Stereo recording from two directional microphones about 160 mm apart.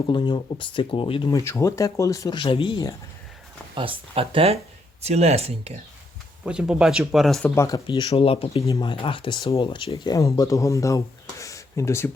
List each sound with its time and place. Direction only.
0.1 s speech: 30° left (ahead or behind)
1.5 s speech: 20° left (ahead or behind)
3.8 s speech: 35° right (ahead or behind)
6.4 s speech: 5° right (ahead or behind)
7.5 s speech: 20° left (ahead or behind)
7.9 s speech: 35° left (ahead or behind)
8.6 s speech: 25° left (ahead or behind)